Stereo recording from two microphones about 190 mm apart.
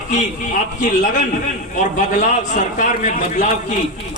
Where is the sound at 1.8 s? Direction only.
40° left (ahead or behind).